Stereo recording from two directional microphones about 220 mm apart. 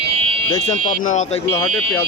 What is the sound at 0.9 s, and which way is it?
Speech, 30° left (ahead or behind).